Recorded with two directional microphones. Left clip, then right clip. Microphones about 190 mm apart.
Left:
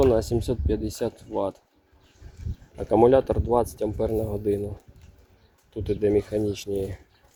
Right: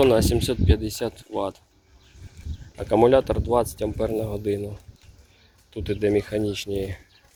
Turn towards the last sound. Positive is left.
turn(degrees=10)  # may be behind; listen again after turning